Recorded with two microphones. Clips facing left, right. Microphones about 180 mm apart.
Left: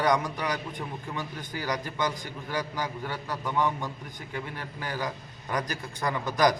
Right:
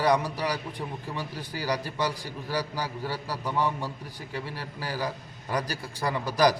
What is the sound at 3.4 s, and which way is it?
Speech, 10° right (ahead or behind).